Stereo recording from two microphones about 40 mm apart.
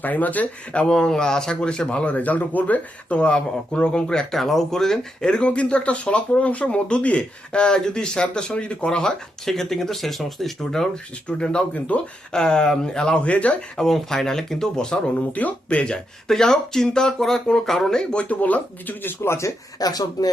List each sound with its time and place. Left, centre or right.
0.0 s speech: left
0.9 s speech: centre; by 3.2 s left
3.2 s speech: left
4.2 s speech: centre
5.4 s speech: left; by 10.8 s centre
10.9 s speech: left
13.2 s speech: left
13.7 s speech: centre
15.3 s speech: left
15.8 s speech: left
17.2 s speech: centre
18.1 s speech: left
18.3 s speech: left
19.2 s a man's voice: left